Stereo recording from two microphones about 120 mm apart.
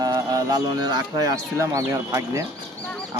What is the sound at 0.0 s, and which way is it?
Speech, 30° right (ahead or behind).